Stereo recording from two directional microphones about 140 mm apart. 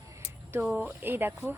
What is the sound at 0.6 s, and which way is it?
Speech, 10° right (ahead or behind).